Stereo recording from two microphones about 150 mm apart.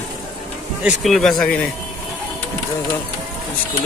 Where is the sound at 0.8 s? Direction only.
5° right (ahead or behind).